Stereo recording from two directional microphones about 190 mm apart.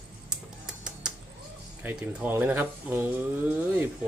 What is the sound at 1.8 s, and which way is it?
Speech, 10° right (ahead or behind).